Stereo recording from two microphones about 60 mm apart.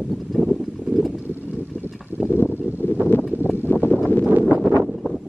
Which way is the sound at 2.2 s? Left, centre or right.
Left.